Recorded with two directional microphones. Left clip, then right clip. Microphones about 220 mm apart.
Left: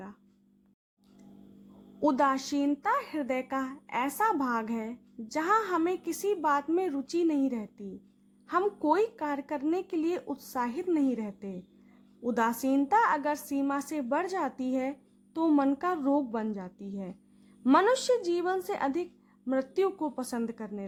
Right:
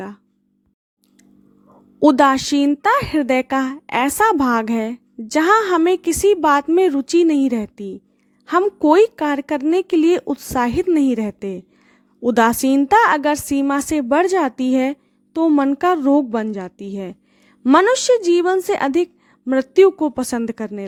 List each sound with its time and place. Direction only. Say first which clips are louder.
2.0 s speech: right 13 dB; 40° right (ahead or behind)